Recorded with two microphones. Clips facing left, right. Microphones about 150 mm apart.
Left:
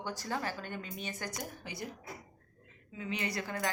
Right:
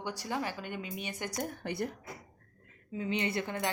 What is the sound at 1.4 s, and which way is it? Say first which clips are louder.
Speech: right 7 dB; 55° right (ahead or behind).